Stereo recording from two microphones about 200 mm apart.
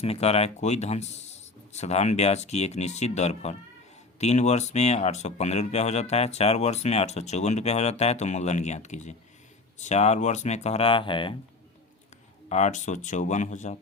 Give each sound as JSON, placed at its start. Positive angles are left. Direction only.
{"t": 0.0, "sound": "speech", "side_deg": 30}
{"t": 12.5, "sound": "speech", "side_deg": 35}